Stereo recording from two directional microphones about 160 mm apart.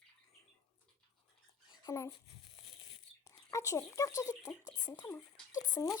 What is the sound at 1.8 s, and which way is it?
Speech, 20° left (ahead or behind).